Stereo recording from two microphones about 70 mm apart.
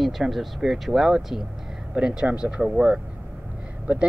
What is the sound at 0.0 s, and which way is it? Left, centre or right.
Speech, centre.